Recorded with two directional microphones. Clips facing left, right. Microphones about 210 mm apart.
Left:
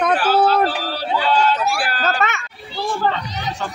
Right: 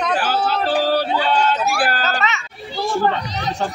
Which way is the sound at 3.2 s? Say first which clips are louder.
Right 3 dB; 35° right (ahead or behind).